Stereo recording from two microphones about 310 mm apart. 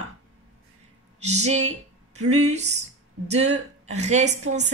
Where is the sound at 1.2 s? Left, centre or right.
Right.